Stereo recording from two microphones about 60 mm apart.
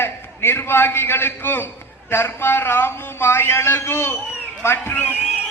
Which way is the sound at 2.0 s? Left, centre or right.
Left.